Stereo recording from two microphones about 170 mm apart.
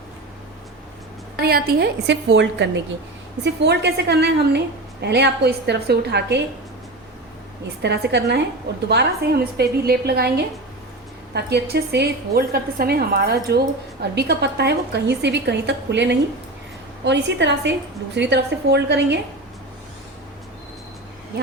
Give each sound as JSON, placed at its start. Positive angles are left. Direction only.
{"t": 1.4, "sound": "a woman's voice", "side_deg": -65}
{"t": 7.8, "sound": "a woman's voice", "side_deg": -85}
{"t": 8.9, "sound": "a woman's voice", "side_deg": -70}